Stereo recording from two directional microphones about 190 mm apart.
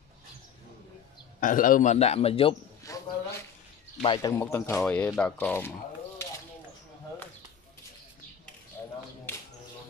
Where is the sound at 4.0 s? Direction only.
25° left (ahead or behind).